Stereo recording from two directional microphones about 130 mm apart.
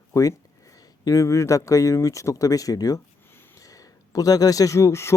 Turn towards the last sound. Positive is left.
turn(degrees=20)  # may be behind; listen again after turning